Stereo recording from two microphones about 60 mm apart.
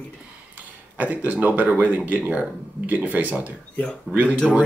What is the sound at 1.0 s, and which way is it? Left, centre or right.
Speech, right.